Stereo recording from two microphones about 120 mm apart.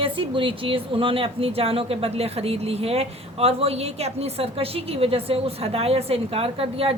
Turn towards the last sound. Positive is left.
turn(degrees=-55)  # may be behind; listen again after turning